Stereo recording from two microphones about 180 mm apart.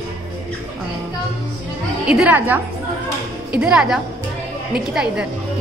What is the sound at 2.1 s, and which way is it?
A woman's voice, 5° right (ahead or behind).